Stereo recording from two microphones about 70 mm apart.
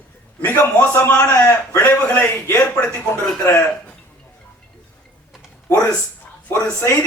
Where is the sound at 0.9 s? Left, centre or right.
Left.